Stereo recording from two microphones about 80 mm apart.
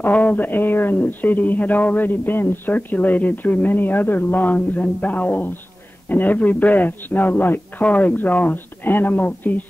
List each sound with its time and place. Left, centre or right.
0.0 s speech: left